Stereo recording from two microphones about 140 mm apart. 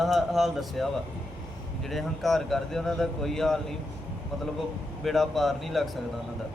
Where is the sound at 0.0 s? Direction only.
Centre (ahead or behind).